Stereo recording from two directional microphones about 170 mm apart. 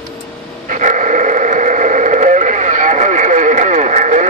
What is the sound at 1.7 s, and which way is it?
Radio, 45° right (ahead or behind).